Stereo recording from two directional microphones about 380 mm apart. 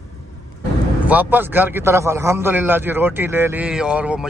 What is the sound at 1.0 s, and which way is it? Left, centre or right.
A man's voice, centre.